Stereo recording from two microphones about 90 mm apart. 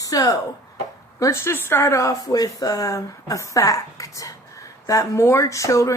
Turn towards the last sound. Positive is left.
turn(degrees=35)  # may be behind; listen again after turning